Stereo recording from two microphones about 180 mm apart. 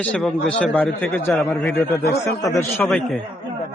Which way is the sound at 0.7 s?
10° left (ahead or behind).